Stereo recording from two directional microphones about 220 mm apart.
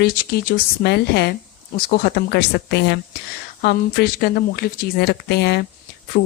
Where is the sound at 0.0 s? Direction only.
45° left (ahead or behind).